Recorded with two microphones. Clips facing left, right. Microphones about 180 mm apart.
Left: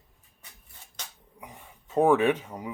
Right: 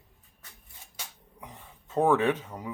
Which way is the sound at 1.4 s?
10° left (ahead or behind).